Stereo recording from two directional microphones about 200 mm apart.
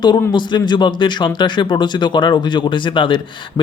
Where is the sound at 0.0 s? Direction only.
20° left (ahead or behind).